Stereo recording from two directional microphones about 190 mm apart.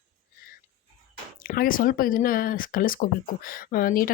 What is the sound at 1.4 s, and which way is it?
Speech, 45° left (ahead or behind).